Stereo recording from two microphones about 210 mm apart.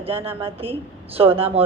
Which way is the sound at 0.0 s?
25° right (ahead or behind).